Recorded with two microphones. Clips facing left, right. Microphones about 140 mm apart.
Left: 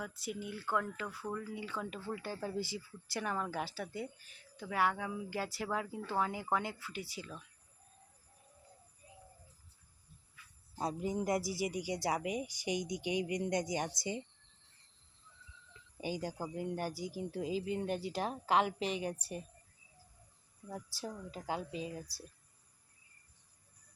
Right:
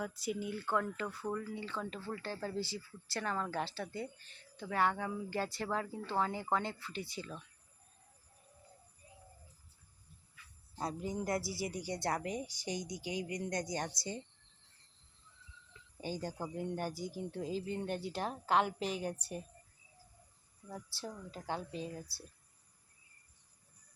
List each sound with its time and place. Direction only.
0.0 s speech: centre (ahead or behind)
10.8 s speech: 20° left (ahead or behind)
16.0 s speech: 15° left (ahead or behind)
21.0 s speech: 5° left (ahead or behind)